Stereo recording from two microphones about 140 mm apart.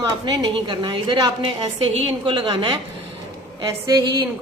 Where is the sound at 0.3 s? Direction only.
35° right (ahead or behind).